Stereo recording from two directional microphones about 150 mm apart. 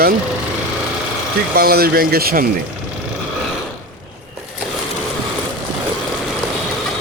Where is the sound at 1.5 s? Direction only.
90° right.